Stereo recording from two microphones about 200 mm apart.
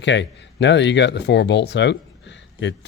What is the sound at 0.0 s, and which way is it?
Speech, 65° left (ahead or behind).